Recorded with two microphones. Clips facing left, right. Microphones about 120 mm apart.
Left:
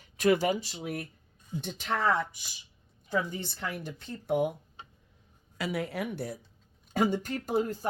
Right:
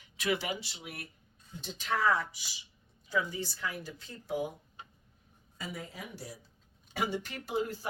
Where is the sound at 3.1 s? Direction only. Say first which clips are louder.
Left 2 dB; 55° left (ahead or behind).